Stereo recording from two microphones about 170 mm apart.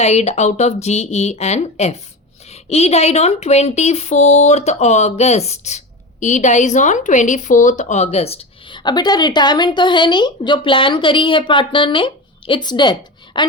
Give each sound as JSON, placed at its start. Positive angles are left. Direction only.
{"t": 0.0, "sound": "speech", "side_deg": 40}